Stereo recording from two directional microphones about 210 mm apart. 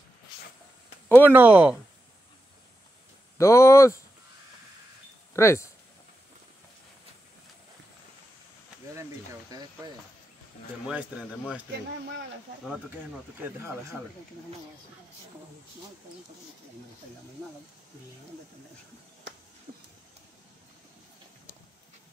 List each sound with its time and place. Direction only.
1.0 s a sound: 10° left (ahead or behind)
1.3 s speech: 5° right (ahead or behind)
3.3 s speech: 15° left (ahead or behind)
5.3 s speech: 15° left (ahead or behind)
8.9 s speech: 15° right (ahead or behind)
10.9 s speech: 5° right (ahead or behind)
13.4 s speech: 10° right (ahead or behind)